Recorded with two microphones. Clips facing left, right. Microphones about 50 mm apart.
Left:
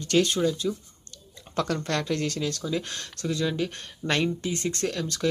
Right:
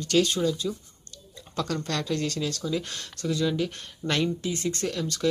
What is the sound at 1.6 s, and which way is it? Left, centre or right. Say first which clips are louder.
Speech: left 2 dB; left.